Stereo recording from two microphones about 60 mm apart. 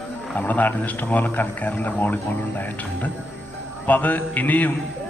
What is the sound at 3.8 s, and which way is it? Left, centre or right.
Speech, left.